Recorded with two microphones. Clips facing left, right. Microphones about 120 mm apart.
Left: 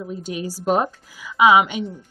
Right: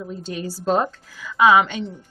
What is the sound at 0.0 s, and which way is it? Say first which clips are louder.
A woman's voice: left 1 dB; 10° left (ahead or behind).